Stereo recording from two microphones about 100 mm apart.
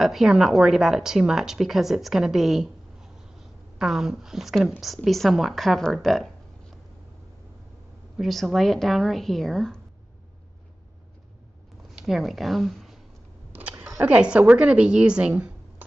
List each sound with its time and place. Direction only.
0.0 s a woman's voice: 5° right (ahead or behind)
8.2 s a woman's voice: centre (ahead or behind)
12.0 s speech: centre (ahead or behind)
13.5 s a sound: 20° right (ahead or behind)
14.0 s a woman's voice: 15° right (ahead or behind)